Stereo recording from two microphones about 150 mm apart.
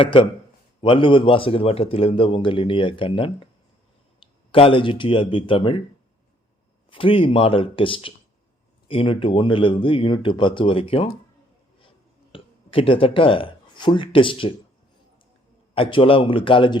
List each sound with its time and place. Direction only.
0.0 s a man's voice: 40° left (ahead or behind)
6.9 s a man's voice: 35° left (ahead or behind)
12.3 s speech: 35° left (ahead or behind)
15.7 s a man's voice: 35° left (ahead or behind)